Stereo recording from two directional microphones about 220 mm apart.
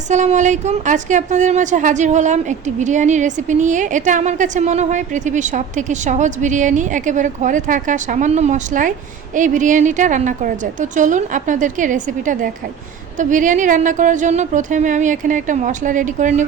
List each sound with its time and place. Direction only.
0.1 s a woman's voice: 35° right (ahead or behind)